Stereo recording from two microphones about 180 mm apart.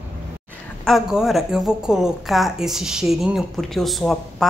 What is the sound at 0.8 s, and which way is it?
A woman's voice, centre (ahead or behind).